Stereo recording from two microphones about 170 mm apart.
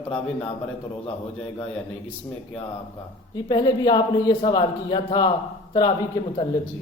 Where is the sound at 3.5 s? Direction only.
25° left (ahead or behind).